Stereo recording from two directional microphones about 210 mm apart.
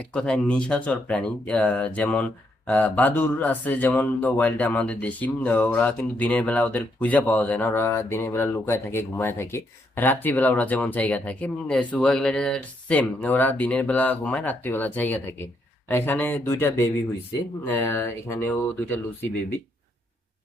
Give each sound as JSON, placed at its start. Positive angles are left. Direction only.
{"t": 0.0, "sound": "speech", "side_deg": 5}